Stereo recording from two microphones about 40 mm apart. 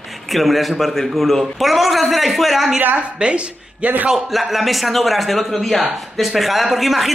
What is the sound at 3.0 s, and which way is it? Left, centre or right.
Speech, right.